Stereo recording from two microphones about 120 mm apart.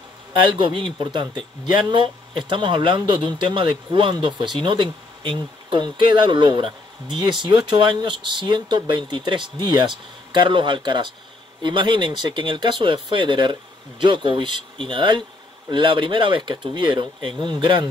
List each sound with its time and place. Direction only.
0.3 s speech: 40° right (ahead or behind)